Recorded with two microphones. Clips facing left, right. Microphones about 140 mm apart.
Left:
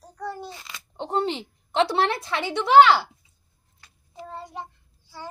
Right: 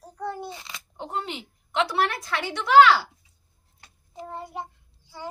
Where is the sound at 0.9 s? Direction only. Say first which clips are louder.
Left 7 dB; 30° left (ahead or behind).